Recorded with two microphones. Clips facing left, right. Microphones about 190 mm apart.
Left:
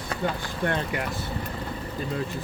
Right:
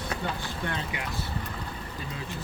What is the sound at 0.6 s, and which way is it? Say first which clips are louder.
Speech: left 8 dB; 50° left (ahead or behind).